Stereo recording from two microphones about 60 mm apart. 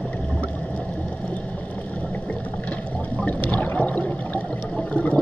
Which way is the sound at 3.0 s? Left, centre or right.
Left.